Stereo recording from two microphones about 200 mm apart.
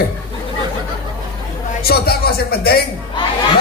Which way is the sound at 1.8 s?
50° left (ahead or behind).